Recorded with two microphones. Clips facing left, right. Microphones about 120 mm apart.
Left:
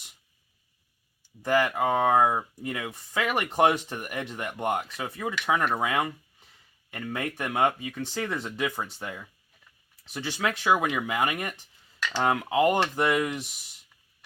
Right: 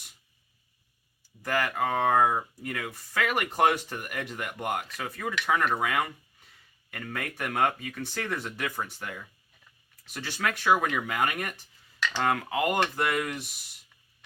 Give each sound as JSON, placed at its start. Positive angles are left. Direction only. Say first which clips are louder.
{"t": 1.4, "sound": "speech", "louder": "left 4 dB", "side_deg": 20}